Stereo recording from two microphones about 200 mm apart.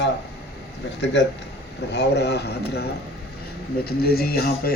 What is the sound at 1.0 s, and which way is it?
Speech, 60° left (ahead or behind).